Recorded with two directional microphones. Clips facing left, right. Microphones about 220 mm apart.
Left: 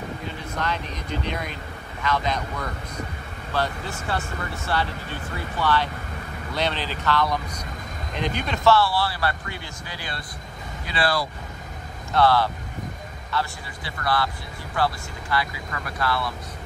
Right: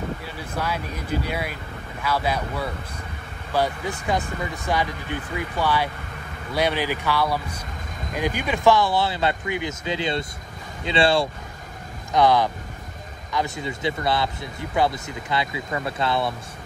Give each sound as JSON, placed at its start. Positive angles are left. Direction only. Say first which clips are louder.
{"t": 0.6, "sound": "speech", "louder": "right 2 dB", "side_deg": -10}